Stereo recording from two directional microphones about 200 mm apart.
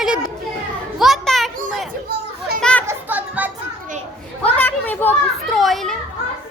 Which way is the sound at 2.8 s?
10° right (ahead or behind).